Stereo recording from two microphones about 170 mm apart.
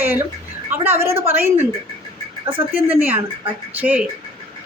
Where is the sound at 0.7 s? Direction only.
15° right (ahead or behind).